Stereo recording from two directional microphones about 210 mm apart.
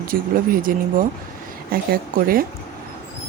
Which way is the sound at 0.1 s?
45° right (ahead or behind).